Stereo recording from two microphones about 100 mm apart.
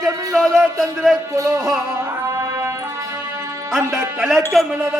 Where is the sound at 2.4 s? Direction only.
35° right (ahead or behind).